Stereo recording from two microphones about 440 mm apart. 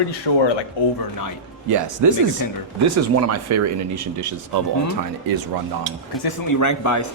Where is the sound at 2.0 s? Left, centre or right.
Right.